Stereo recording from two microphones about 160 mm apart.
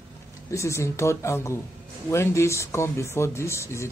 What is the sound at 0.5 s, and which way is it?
Speech, 20° left (ahead or behind).